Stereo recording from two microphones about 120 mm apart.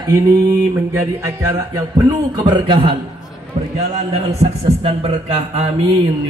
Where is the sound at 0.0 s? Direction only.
30° right (ahead or behind).